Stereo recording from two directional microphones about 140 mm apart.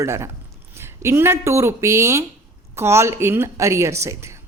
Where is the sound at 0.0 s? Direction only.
20° right (ahead or behind).